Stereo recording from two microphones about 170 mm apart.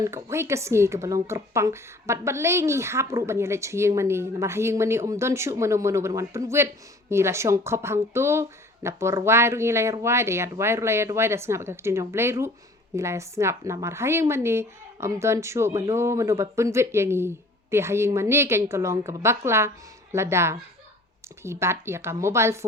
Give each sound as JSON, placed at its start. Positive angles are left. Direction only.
{"t": 0.0, "sound": "a woman's voice", "side_deg": -15}